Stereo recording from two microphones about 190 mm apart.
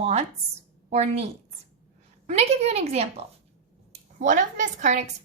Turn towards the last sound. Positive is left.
turn(degrees=-40)  # may be behind; listen again after turning